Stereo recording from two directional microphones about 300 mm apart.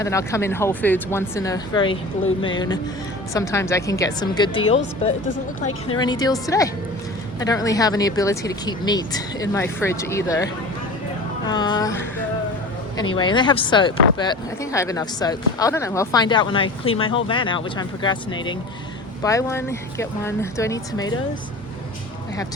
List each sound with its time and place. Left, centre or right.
0.0 s speech: centre
3.3 s speech: centre
6.0 s speech: centre